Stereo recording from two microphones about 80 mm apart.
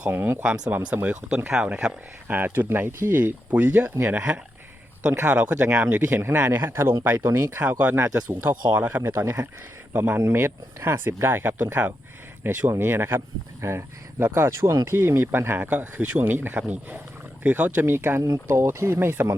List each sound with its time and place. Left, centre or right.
0.0 s speech: right
0.7 s speech: centre
5.1 s speech: right
7.6 s speech: centre
7.9 s speech: right
9.1 s speech: right
18.2 s speech: right